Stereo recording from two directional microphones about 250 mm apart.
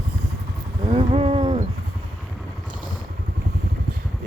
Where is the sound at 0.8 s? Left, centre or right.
Right.